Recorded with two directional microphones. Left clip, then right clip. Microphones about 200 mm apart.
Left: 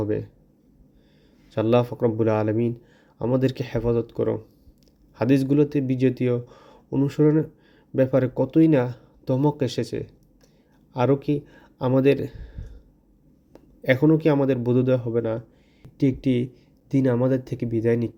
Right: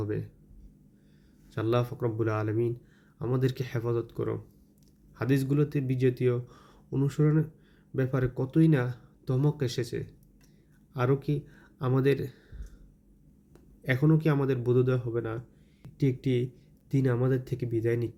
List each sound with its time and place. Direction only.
0.0 s speech: 35° left (ahead or behind)
1.5 s speech: 35° left (ahead or behind)